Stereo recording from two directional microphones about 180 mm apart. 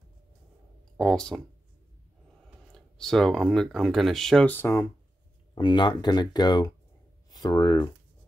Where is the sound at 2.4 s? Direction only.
Centre (ahead or behind).